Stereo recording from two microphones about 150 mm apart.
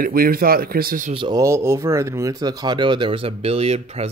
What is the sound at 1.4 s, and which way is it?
Speech, 20° right (ahead or behind).